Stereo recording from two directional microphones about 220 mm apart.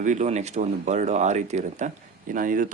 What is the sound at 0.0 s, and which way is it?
Speech, 35° right (ahead or behind).